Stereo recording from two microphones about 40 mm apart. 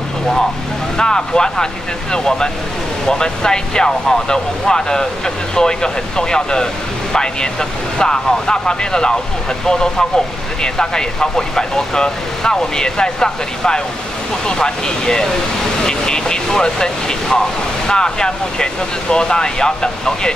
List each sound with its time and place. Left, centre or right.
0.9 s speech: centre